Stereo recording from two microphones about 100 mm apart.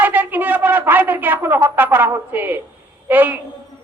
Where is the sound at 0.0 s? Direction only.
15° right (ahead or behind).